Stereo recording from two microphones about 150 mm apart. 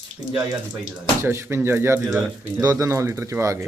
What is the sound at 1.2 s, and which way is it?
Speech, 15° right (ahead or behind).